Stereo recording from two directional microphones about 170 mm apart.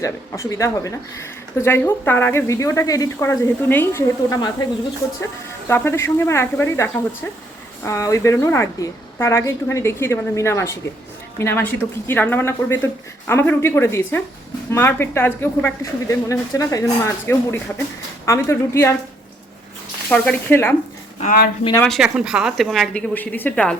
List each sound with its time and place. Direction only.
0.0 s speech: 20° left (ahead or behind)
5.6 s speech: 15° left (ahead or behind)
20.1 s speech: 10° left (ahead or behind)
21.8 s speech: centre (ahead or behind)